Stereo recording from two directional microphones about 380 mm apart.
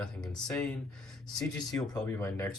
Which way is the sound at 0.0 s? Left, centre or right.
Centre.